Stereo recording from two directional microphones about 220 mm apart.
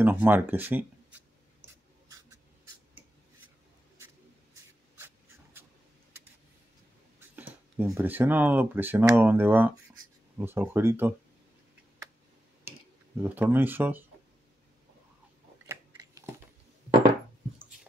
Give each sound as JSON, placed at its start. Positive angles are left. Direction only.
{"t": 0.0, "sound": "speech", "side_deg": -10}
{"t": 2.0, "sound": "a sound", "side_deg": -15}
{"t": 4.9, "sound": "writing", "side_deg": -10}
{"t": 7.2, "sound": "speech", "side_deg": -10}
{"t": 13.2, "sound": "speech", "side_deg": -10}
{"t": 15.6, "sound": "biting", "side_deg": -15}